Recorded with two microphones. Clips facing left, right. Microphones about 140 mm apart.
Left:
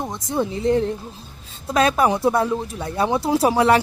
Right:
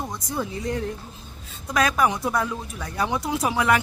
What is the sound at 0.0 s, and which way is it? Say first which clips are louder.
Speech: left 5 dB; 25° left (ahead or behind).